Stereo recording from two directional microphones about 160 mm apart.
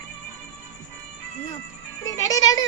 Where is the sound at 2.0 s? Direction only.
20° left (ahead or behind).